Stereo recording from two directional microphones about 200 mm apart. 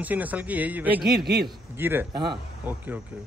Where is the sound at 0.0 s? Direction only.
10° right (ahead or behind).